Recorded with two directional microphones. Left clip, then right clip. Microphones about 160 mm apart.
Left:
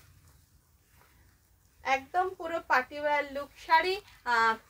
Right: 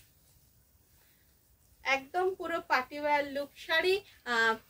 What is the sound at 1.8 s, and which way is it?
A child's voice, 25° right (ahead or behind).